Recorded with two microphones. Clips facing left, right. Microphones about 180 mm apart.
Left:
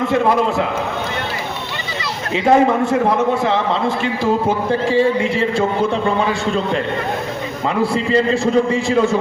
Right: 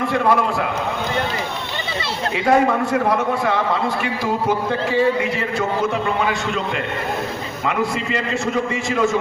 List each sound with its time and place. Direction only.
2.3 s a man's voice: 25° left (ahead or behind)
7.8 s a man's voice: 35° left (ahead or behind)